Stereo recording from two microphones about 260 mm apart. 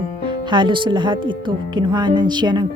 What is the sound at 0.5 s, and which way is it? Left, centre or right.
Speech, centre.